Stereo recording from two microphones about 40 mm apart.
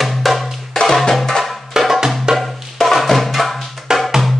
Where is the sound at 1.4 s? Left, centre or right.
Centre.